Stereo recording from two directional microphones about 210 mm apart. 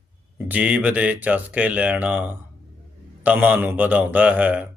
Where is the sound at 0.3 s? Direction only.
5° right (ahead or behind).